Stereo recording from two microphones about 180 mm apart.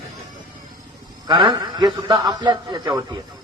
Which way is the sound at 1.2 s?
25° right (ahead or behind).